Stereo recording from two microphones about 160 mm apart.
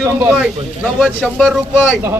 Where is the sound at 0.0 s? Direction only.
15° right (ahead or behind).